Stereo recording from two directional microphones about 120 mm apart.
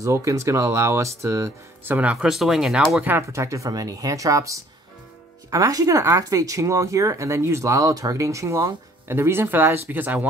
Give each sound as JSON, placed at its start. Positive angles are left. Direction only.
{"t": 0.0, "sound": "speech", "side_deg": -25}
{"t": 2.1, "sound": "speech", "side_deg": 0}